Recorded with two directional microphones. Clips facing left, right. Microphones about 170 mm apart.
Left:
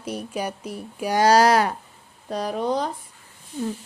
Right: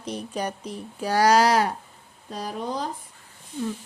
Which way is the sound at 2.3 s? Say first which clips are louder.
Left 6 dB; 70° left (ahead or behind).